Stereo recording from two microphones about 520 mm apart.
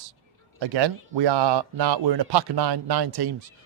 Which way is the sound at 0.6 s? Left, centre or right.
Right.